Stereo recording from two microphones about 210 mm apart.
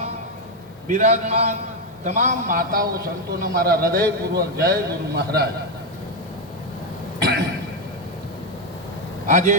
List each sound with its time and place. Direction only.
0.9 s a man's voice: 35° right (ahead or behind)
7.2 s cough: 50° right (ahead or behind)
9.2 s a man's voice: 35° right (ahead or behind)